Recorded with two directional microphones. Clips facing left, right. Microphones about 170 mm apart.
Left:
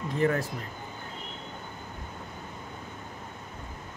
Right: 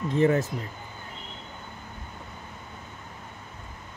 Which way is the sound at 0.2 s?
20° right (ahead or behind).